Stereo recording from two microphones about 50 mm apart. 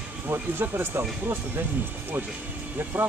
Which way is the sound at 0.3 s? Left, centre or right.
Right.